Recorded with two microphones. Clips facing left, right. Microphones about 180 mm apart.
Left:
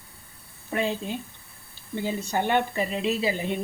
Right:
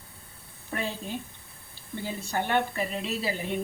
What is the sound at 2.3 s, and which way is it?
Speech, 15° left (ahead or behind).